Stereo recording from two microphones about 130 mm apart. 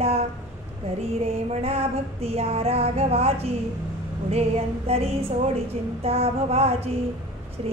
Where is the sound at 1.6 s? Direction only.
50° right (ahead or behind).